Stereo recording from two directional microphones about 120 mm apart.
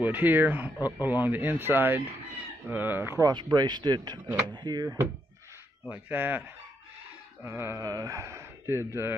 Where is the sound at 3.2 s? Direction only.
35° right (ahead or behind).